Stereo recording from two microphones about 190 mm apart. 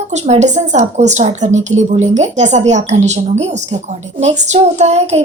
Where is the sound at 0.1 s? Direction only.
40° right (ahead or behind).